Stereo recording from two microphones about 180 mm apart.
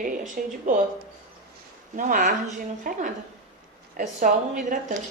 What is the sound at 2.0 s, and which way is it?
A woman's voice, 45° right (ahead or behind).